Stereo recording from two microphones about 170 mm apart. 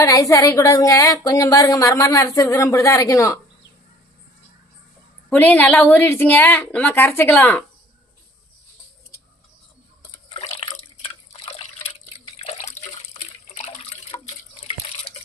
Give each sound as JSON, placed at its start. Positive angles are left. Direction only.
{"t": 0.0, "sound": "a woman's voice", "side_deg": 20}
{"t": 5.3, "sound": "a woman's voice", "side_deg": 10}
{"t": 10.0, "sound": "drip", "side_deg": 30}
{"t": 11.4, "sound": "water", "side_deg": 35}